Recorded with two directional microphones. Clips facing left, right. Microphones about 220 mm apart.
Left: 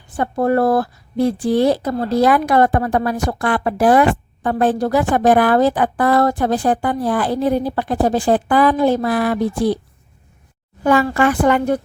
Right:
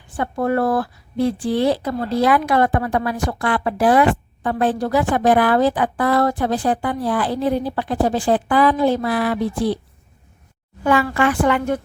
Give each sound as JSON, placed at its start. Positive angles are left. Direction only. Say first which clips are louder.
{"t": 0.2, "sound": "a woman's voice", "louder": "left 3 dB", "side_deg": 40}
{"t": 11.1, "sound": "a woman's voice", "louder": "left 3 dB", "side_deg": 40}